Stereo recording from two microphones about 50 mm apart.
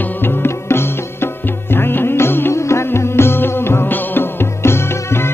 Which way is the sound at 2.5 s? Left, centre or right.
Left.